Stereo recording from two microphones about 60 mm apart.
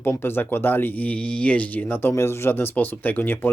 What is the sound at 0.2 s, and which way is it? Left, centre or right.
Speech, left.